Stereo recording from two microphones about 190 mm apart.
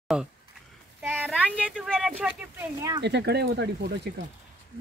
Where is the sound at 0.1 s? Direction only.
5° right (ahead or behind).